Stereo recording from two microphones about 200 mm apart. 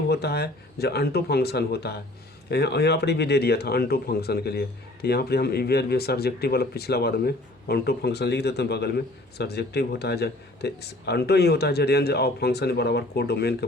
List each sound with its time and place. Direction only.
0.1 s speech: 55° left (ahead or behind)